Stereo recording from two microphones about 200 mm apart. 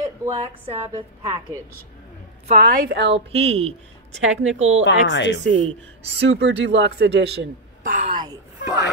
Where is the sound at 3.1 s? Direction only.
30° right (ahead or behind).